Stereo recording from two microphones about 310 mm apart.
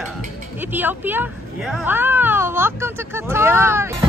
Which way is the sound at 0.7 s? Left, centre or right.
Centre.